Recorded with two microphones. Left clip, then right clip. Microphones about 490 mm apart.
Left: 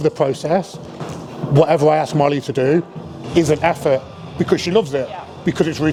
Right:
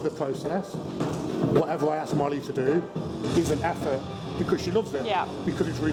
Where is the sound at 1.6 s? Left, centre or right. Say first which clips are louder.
Left 12 dB; left.